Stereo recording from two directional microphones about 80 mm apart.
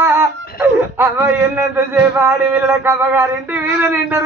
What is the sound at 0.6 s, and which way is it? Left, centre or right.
Speech, right.